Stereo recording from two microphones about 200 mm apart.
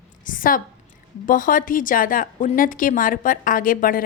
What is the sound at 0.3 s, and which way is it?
A woman's voice, 45° left (ahead or behind).